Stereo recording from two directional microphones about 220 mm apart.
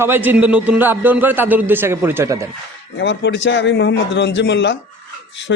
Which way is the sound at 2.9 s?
55° left (ahead or behind).